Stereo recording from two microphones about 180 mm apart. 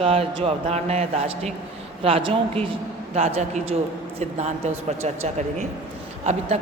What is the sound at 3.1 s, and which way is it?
Speech, 40° right (ahead or behind).